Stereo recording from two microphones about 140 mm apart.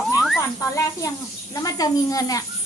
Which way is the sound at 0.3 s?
20° left (ahead or behind).